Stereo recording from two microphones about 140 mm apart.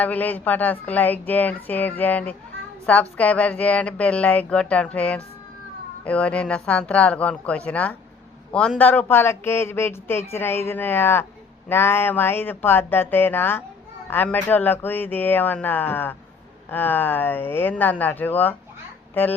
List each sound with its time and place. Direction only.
0.0 s speech: 10° left (ahead or behind)